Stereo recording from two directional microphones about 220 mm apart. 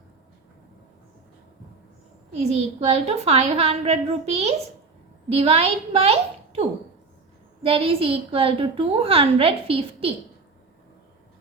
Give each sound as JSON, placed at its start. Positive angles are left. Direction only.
{"t": 2.3, "sound": "a woman's voice", "side_deg": -30}